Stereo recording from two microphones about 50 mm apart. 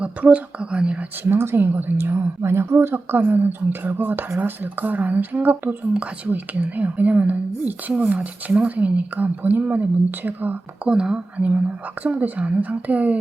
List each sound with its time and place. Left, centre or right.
0.0 s speech: right
1.2 s a woman's voice: right
10.8 s speech: centre
12.0 s speech: right